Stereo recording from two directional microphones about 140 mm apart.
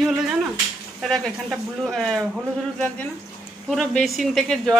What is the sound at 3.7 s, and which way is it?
Speech, centre (ahead or behind).